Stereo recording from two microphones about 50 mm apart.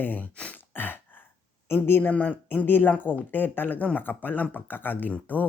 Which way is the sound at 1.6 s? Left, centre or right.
Left.